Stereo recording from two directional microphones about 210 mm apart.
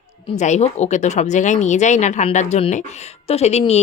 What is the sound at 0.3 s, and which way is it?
Speech, 35° left (ahead or behind).